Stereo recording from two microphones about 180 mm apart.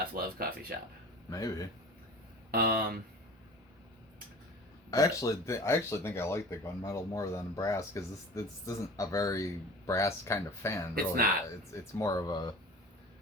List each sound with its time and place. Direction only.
0.1 s speech: 55° right (ahead or behind)
1.3 s speech: 20° left (ahead or behind)
2.5 s speech: 55° right (ahead or behind)
4.9 s speech: 20° left (ahead or behind)
10.9 s speech: 55° right (ahead or behind)
11.7 s speech: 20° left (ahead or behind)